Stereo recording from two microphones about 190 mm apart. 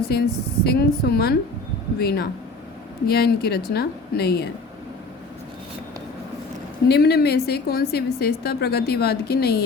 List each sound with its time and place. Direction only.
0.1 s a woman's voice: 60° left (ahead or behind)
6.8 s a woman's voice: 60° left (ahead or behind)